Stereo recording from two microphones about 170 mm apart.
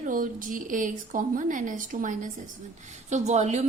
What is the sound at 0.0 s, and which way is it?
A woman's voice, 50° right (ahead or behind).